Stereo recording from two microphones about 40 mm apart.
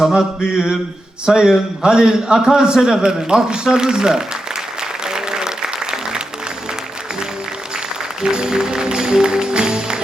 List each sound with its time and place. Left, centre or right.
0.2 s mantra: centre
1.2 s a man's voice: centre
4.8 s applause: centre
8.2 s a man's voice: centre